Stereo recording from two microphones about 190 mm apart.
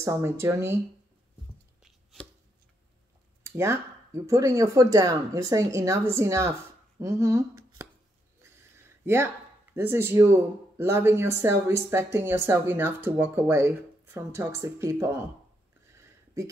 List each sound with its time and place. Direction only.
0.0 s speech: 15° right (ahead or behind)
1.8 s chopping: centre (ahead or behind)
3.4 s speech: 15° right (ahead or behind)
8.4 s a sound: 15° right (ahead or behind)
9.8 s speech: 15° right (ahead or behind)